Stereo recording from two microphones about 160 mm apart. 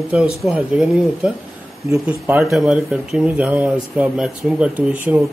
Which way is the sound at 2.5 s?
5° right (ahead or behind).